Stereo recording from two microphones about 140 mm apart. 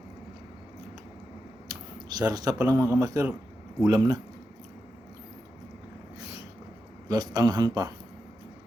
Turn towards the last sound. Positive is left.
turn(degrees=-25)  # may be behind; listen again after turning